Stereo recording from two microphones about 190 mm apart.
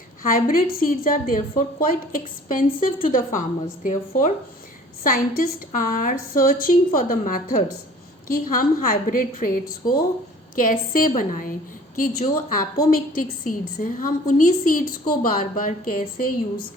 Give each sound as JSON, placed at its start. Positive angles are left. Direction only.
{"t": 0.3, "sound": "a woman's voice", "side_deg": 45}